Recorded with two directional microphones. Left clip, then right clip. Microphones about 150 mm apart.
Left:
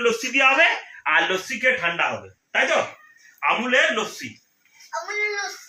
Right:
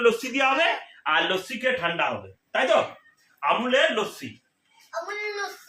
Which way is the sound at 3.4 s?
25° right (ahead or behind).